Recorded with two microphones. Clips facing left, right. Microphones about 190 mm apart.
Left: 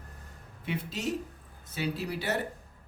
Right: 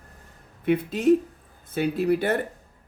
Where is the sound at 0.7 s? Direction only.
55° right (ahead or behind).